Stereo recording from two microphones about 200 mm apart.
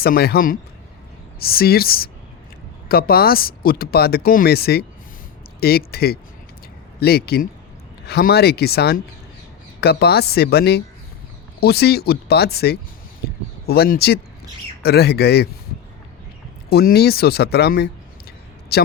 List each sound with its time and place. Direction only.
0.0 s speech: 50° left (ahead or behind)
13.2 s a sound: 50° left (ahead or behind)
14.8 s speech: 55° left (ahead or behind)
16.6 s speech: 50° left (ahead or behind)